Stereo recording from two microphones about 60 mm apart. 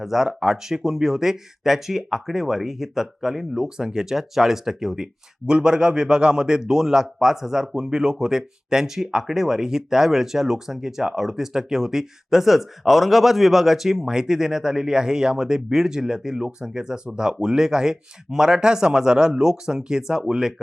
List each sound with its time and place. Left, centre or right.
0.0 s speech: centre